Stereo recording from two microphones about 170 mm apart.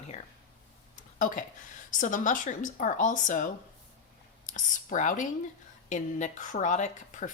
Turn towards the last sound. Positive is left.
turn(degrees=45)  # may be behind; listen again after turning